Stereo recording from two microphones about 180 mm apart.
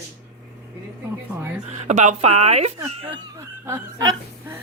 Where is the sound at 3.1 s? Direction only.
15° right (ahead or behind).